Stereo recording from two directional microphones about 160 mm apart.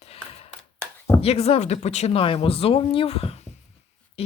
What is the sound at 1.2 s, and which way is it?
Speech, 40° left (ahead or behind).